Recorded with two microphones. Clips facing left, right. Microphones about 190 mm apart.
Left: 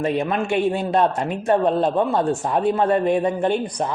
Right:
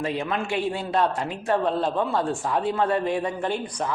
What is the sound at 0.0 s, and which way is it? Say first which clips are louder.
Speech: left 5 dB; 20° left (ahead or behind).